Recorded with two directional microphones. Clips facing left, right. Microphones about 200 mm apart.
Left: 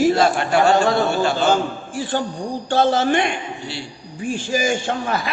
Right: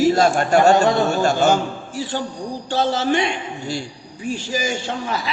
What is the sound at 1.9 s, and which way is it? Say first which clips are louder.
A man's voice: left 3 dB; 50° left (ahead or behind).